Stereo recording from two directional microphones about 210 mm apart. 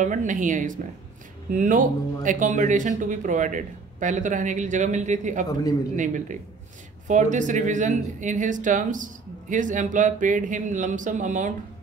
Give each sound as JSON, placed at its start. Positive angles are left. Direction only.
{"t": 0.0, "sound": "speech", "side_deg": -40}